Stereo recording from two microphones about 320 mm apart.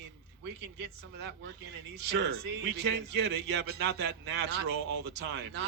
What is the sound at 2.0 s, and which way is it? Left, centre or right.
Speech, right.